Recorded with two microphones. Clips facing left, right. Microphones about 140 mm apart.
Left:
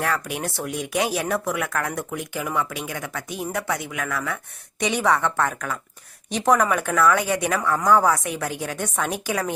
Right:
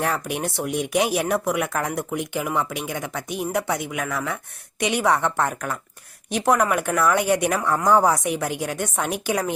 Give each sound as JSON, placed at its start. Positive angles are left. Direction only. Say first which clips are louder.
{"t": 0.0, "sound": "a woman's voice", "louder": "right 1 dB", "side_deg": -20}